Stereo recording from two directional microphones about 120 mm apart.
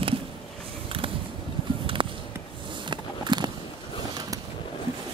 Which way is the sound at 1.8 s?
45° right (ahead or behind).